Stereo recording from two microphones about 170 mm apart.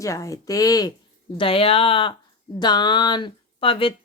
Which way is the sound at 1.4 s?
35° left (ahead or behind).